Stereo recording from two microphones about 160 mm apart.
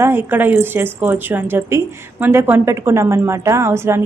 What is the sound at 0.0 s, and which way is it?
A woman's voice, 15° right (ahead or behind).